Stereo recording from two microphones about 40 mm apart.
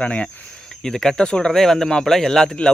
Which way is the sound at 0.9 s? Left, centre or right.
Centre.